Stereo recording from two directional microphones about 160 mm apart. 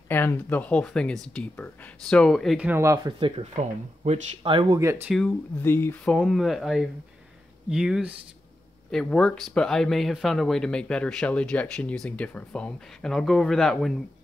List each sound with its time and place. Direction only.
0.1 s speech: 15° left (ahead or behind)
2.7 s speech: 15° right (ahead or behind)
5.1 s speech: centre (ahead or behind)
5.6 s speech: 15° left (ahead or behind)